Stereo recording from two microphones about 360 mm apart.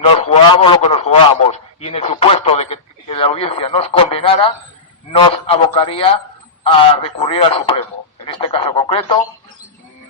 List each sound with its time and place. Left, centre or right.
0.0 s a man's voice: centre